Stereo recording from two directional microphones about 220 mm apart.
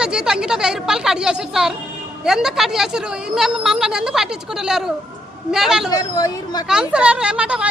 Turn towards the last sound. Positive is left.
turn(degrees=-5)  # may be behind; listen again after turning